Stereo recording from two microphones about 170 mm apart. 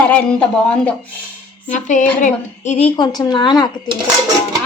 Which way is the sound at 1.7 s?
45° left (ahead or behind).